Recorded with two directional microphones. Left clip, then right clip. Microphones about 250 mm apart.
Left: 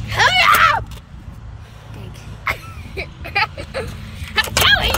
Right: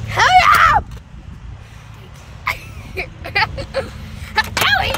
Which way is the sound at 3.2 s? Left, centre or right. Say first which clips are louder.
Right 1 dB; centre.